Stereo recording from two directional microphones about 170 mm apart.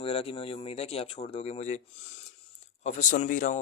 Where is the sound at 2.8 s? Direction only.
45° left (ahead or behind).